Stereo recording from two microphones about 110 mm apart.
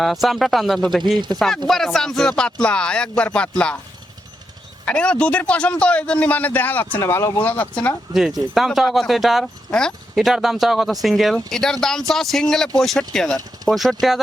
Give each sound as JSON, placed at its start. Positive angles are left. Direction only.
{"t": 0.0, "sound": "speech", "side_deg": 0}
{"t": 4.9, "sound": "speech", "side_deg": 10}
{"t": 7.0, "sound": "speech", "side_deg": 25}
{"t": 7.4, "sound": "speech", "side_deg": 15}
{"t": 8.5, "sound": "speech", "side_deg": -5}